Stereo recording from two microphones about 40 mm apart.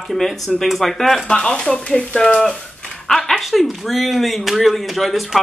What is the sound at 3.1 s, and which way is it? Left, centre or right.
Speech, centre.